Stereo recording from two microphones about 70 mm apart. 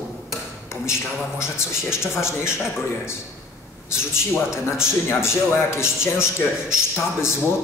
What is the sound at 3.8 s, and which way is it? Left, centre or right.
Speech, left.